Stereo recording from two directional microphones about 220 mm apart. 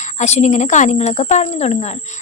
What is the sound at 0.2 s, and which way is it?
Speech, 30° left (ahead or behind).